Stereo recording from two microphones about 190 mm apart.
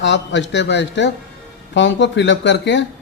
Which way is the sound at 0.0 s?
70° left (ahead or behind).